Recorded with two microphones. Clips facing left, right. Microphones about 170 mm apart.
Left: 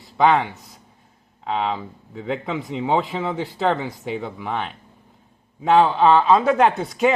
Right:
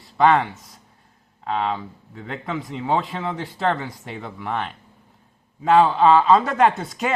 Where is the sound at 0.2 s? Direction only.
Centre (ahead or behind).